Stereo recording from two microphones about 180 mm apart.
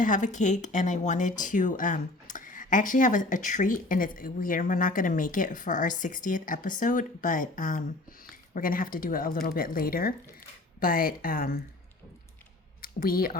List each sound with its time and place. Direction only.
0.0 s speech: 45° left (ahead or behind)
12.8 s speech: 55° left (ahead or behind)